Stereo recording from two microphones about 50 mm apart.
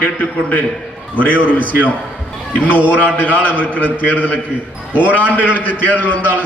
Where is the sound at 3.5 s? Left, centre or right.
Left.